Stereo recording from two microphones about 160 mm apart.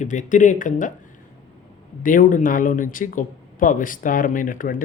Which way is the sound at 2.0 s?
55° left (ahead or behind).